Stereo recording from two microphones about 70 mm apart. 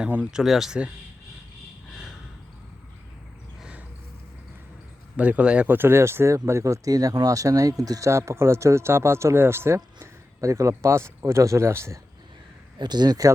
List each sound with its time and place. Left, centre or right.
0.3 s speech: centre
1.9 s a sound: centre
5.1 s speech: centre
5.6 s speech: right
12.8 s speech: right